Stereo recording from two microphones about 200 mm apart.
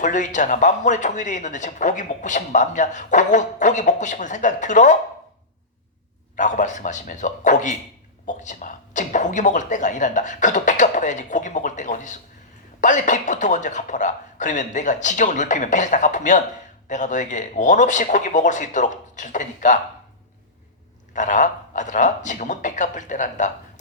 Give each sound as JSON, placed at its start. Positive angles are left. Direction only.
{"t": 0.0, "sound": "speech", "side_deg": 40}
{"t": 6.3, "sound": "speech", "side_deg": 40}
{"t": 21.1, "sound": "speech", "side_deg": 40}